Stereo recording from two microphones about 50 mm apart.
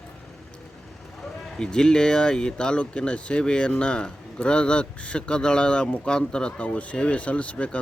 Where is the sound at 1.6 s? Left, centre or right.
Centre.